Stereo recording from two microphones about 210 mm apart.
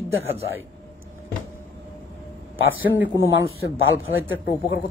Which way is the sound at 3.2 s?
65° left (ahead or behind).